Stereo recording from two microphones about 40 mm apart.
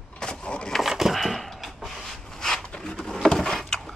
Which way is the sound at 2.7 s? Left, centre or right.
Left.